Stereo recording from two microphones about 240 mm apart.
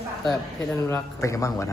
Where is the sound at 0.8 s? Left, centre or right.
Centre.